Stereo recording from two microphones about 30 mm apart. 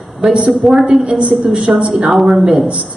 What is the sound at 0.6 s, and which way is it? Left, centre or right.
Speech, centre.